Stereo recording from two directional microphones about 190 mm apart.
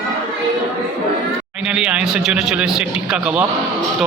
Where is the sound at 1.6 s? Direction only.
5° right (ahead or behind).